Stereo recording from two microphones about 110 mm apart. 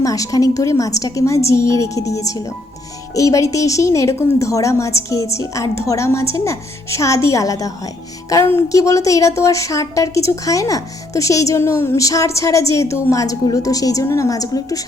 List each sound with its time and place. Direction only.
0.0 s a woman's voice: 30° left (ahead or behind)